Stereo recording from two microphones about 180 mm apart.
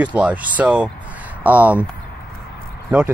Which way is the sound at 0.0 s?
10° right (ahead or behind).